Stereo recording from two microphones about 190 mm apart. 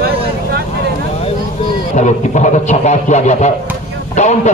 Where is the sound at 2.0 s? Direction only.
40° left (ahead or behind).